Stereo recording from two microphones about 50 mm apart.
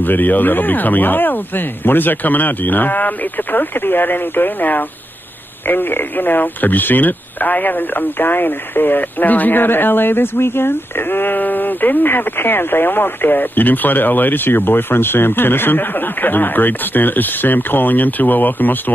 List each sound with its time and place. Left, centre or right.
0.0 s speech: left